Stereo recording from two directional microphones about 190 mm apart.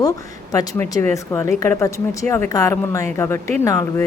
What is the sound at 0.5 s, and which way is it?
Speech, 20° left (ahead or behind).